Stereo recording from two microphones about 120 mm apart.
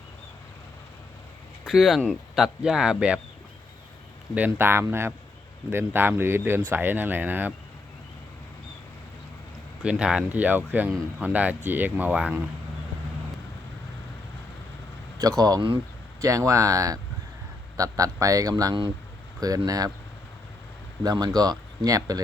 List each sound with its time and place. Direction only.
1.6 s speech: centre (ahead or behind)
4.4 s speech: 15° right (ahead or behind)
9.8 s speech: 10° right (ahead or behind)
15.2 s speech: 30° right (ahead or behind)
21.0 s speech: 35° right (ahead or behind)